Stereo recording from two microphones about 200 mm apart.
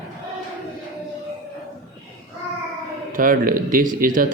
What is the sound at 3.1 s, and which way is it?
Speech, 45° right (ahead or behind).